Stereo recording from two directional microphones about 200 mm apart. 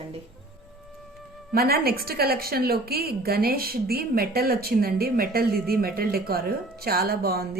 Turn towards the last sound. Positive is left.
turn(degrees=-50)  # may be behind; listen again after turning